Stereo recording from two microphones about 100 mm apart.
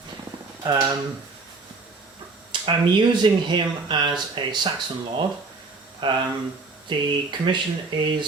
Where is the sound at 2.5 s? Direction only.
50° right (ahead or behind).